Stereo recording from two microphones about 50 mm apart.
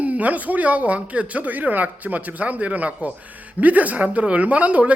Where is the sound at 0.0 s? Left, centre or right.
Right.